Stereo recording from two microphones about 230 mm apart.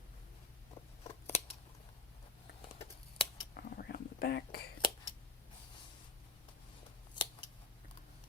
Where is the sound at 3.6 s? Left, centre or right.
Left.